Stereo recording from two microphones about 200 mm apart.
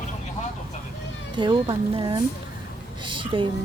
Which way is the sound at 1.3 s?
25° right (ahead or behind).